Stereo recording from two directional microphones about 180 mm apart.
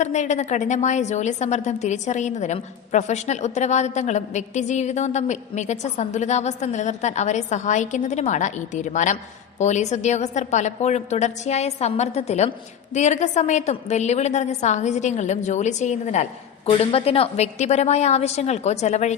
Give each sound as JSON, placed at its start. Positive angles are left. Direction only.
{"t": 0.0, "sound": "a woman's voice", "side_deg": 40}